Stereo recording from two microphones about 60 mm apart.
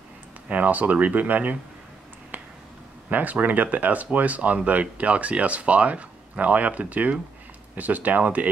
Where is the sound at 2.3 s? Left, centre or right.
Right.